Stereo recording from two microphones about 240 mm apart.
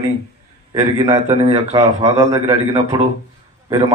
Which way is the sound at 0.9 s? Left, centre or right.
Centre.